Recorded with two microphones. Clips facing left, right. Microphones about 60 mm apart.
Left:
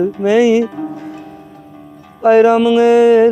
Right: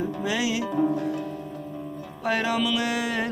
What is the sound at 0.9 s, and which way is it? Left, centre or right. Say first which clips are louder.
Music: right 1 dB; left.